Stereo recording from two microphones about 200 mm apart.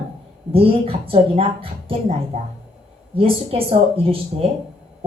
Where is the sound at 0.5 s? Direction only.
30° right (ahead or behind).